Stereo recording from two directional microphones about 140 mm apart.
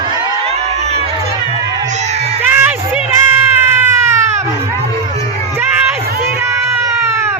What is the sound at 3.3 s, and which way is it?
Baby cry, 15° right (ahead or behind).